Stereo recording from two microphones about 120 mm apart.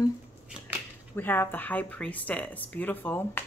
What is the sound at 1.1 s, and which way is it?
Speech, 15° left (ahead or behind).